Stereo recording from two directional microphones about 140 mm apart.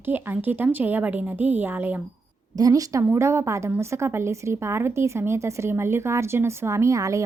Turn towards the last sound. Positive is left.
turn(degrees=-25)  # may be behind; listen again after turning